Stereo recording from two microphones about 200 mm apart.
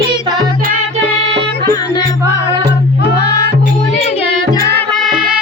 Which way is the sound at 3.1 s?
55° left (ahead or behind).